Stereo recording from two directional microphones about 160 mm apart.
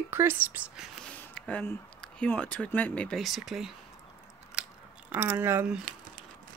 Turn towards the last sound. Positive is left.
turn(degrees=-10)  # may be behind; listen again after turning